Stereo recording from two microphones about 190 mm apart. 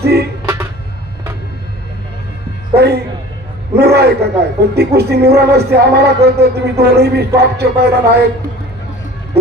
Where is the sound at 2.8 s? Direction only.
60° right (ahead or behind).